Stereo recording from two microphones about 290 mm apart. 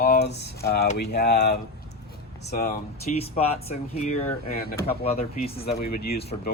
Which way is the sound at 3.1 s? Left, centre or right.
Left.